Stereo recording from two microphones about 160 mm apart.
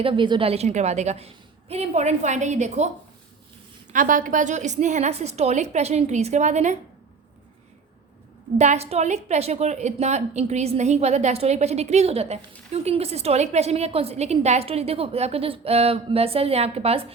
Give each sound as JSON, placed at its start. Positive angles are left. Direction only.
{"t": 0.0, "sound": "a woman's voice", "side_deg": -30}
{"t": 3.9, "sound": "a woman's voice", "side_deg": -55}
{"t": 8.5, "sound": "a woman's voice", "side_deg": -45}